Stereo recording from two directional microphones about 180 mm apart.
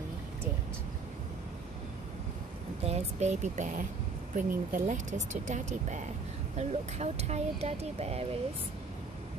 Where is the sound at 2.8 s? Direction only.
40° right (ahead or behind).